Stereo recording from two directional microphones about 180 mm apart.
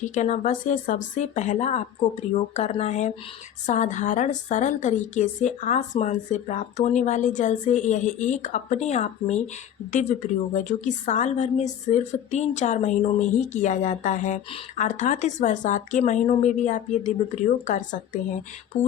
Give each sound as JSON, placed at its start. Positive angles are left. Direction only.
{"t": 0.0, "sound": "a woman's voice", "side_deg": 40}